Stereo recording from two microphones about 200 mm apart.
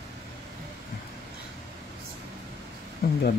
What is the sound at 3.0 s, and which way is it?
Speech, 50° left (ahead or behind).